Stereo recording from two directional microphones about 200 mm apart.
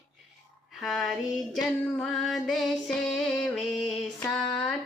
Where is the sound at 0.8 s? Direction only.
Centre (ahead or behind).